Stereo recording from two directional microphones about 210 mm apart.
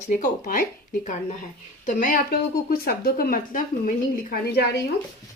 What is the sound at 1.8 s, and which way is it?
Speech, 40° left (ahead or behind).